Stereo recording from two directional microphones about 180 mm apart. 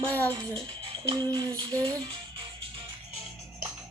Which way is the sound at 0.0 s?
10° left (ahead or behind).